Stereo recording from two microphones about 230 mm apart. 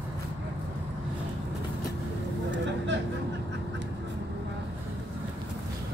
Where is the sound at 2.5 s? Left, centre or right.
Right.